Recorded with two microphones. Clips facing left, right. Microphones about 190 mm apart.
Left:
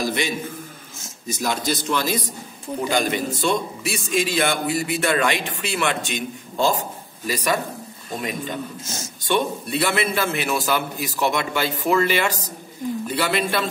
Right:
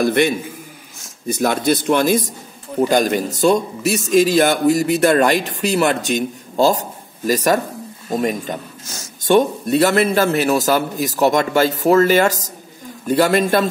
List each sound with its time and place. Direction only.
0.0 s a man's voice: 55° right (ahead or behind)